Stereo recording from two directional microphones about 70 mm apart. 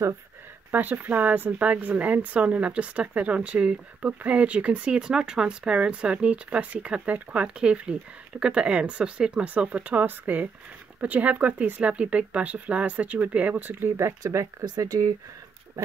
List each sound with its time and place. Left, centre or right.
0.7 s speech: right
14.8 s speech: right